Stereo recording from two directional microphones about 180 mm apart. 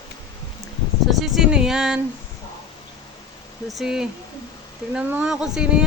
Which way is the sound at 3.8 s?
5° right (ahead or behind).